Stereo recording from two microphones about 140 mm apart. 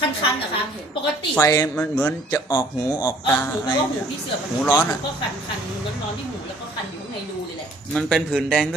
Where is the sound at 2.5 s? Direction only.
25° left (ahead or behind).